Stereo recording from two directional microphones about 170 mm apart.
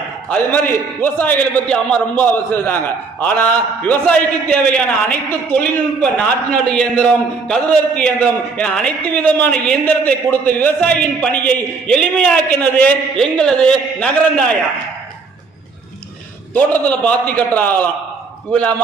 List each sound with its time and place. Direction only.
0.3 s a man's voice: 10° left (ahead or behind)
16.6 s a man's voice: 10° left (ahead or behind)